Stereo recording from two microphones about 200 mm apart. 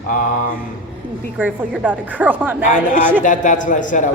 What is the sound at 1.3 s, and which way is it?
Speech, 5° right (ahead or behind).